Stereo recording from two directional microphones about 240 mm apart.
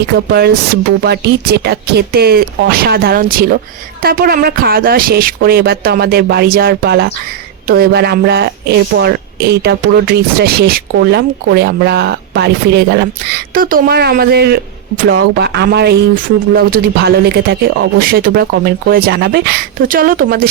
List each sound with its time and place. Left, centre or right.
0.3 s speech: right